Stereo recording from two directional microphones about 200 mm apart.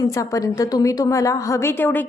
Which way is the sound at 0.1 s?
15° left (ahead or behind).